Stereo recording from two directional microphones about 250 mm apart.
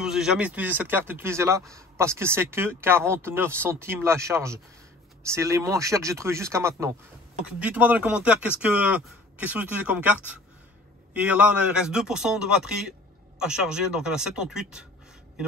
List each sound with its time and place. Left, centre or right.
0.0 s speech: centre